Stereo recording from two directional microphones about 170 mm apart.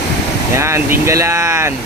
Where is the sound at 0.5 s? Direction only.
15° right (ahead or behind).